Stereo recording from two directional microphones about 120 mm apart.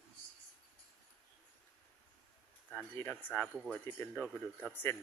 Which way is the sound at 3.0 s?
15° left (ahead or behind).